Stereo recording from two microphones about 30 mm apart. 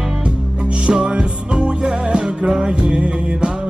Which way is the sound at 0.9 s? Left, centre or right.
Right.